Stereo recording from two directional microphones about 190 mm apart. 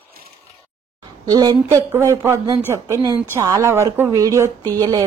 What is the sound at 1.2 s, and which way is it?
Speech, 20° right (ahead or behind).